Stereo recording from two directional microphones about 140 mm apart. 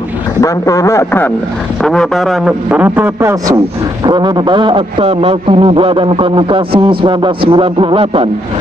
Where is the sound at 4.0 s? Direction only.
30° right (ahead or behind).